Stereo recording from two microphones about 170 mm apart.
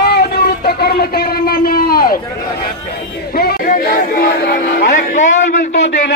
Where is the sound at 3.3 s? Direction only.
65° left (ahead or behind); by 5.7 s 45° left (ahead or behind).